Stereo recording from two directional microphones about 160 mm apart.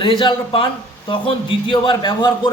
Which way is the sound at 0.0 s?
30° left (ahead or behind).